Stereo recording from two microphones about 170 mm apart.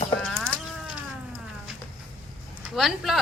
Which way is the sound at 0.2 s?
Centre (ahead or behind).